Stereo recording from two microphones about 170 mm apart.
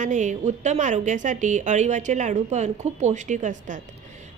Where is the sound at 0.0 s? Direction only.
45° right (ahead or behind).